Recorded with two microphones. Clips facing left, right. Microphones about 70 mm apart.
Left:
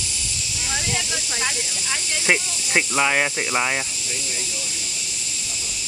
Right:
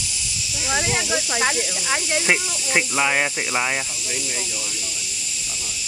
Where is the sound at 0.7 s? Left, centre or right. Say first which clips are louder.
Right 5 dB; right.